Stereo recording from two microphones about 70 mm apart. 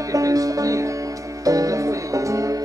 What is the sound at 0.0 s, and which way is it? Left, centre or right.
Music, right.